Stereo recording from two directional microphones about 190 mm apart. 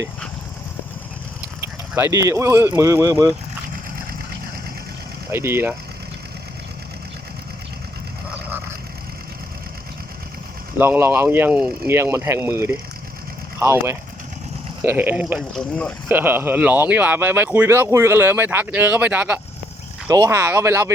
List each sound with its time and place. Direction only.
2.0 s speech: 15° right (ahead or behind)
5.3 s speech: 15° right (ahead or behind)
10.8 s speech: 10° right (ahead or behind); by 15.9 s 5° left (ahead or behind)
16.0 s speech: 10° right (ahead or behind)